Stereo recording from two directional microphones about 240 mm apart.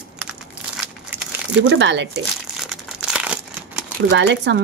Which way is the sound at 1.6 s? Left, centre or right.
Right.